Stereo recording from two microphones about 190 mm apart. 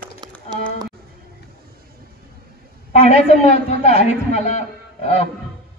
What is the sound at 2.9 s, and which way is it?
A woman's voice, 35° left (ahead or behind).